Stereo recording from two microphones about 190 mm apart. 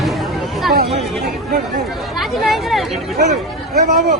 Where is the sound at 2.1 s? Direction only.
Centre (ahead or behind).